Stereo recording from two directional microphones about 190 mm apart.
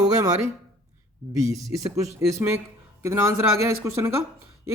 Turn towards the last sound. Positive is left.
turn(degrees=-15)  # may be behind; listen again after turning